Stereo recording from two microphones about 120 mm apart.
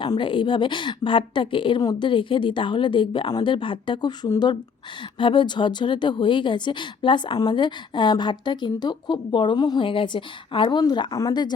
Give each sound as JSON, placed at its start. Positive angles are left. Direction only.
{"t": 0.0, "sound": "a woman's voice", "side_deg": 40}